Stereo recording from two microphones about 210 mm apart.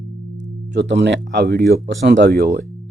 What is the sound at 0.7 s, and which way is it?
Speech, 55° right (ahead or behind).